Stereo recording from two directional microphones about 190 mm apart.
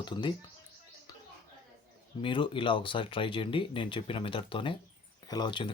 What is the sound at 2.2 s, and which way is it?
Speech, 25° left (ahead or behind).